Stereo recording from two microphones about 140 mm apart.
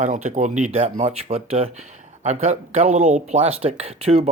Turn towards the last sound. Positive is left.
turn(degrees=-45)  # may be behind; listen again after turning